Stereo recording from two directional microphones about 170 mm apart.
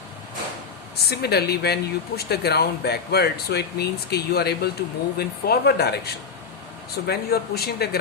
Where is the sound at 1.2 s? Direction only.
70° left (ahead or behind).